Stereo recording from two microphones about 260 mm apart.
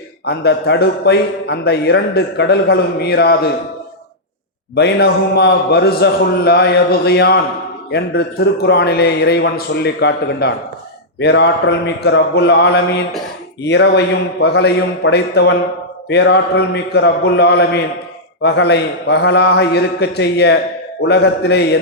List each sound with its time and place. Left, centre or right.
0.3 s a man's voice: left
4.7 s a man's voice: left